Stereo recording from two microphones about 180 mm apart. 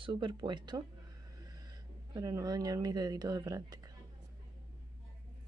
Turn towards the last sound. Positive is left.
turn(degrees=-20)  # may be behind; listen again after turning